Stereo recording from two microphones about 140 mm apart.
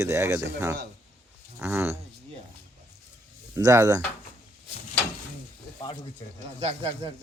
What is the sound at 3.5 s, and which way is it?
Speech, 20° right (ahead or behind).